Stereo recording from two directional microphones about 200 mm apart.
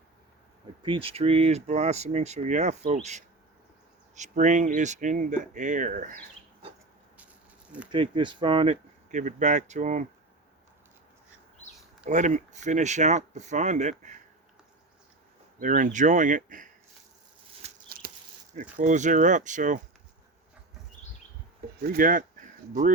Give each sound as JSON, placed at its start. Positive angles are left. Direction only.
{"t": 0.8, "sound": "speech", "side_deg": -25}
{"t": 7.9, "sound": "speech", "side_deg": -25}
{"t": 12.0, "sound": "speech", "side_deg": -35}
{"t": 15.6, "sound": "speech", "side_deg": -40}
{"t": 17.8, "sound": "a sound", "side_deg": -45}
{"t": 18.8, "sound": "speech", "side_deg": -40}
{"t": 21.8, "sound": "speech", "side_deg": -45}